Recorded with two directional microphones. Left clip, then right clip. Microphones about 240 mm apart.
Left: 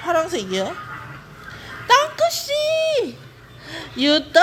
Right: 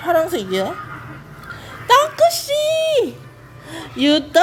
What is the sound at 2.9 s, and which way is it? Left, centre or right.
Music, centre.